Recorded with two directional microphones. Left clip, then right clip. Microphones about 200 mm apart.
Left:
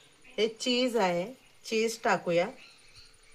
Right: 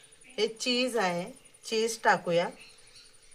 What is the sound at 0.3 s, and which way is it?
Speech, 15° right (ahead or behind).